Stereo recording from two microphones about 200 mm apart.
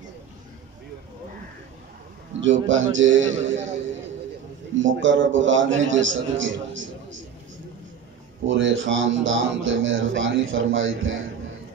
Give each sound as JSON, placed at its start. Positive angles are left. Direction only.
{"t": 2.4, "sound": "speech", "side_deg": -70}
{"t": 4.7, "sound": "speech", "side_deg": -70}
{"t": 8.5, "sound": "speech", "side_deg": -65}